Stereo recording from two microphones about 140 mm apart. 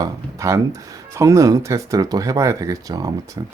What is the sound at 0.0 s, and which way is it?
Speech, 20° right (ahead or behind).